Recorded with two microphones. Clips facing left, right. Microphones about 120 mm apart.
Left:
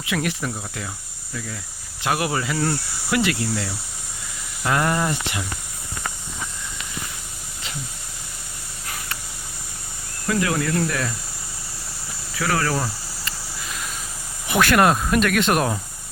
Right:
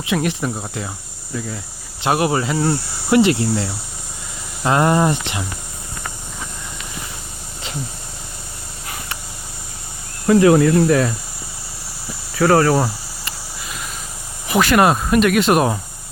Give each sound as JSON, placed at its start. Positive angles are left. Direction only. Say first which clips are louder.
{"t": 0.0, "sound": "speech", "louder": "right 5 dB", "side_deg": -25}
{"t": 2.0, "sound": "speech", "louder": "right 6 dB", "side_deg": -25}
{"t": 10.2, "sound": "speech", "louder": "right 11 dB", "side_deg": -30}
{"t": 12.4, "sound": "speech", "louder": "right 9 dB", "side_deg": -35}
{"t": 14.4, "sound": "speech", "louder": "right 3 dB", "side_deg": 0}